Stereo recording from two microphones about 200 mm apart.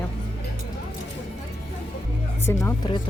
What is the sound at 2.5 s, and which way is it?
Speech, 15° left (ahead or behind).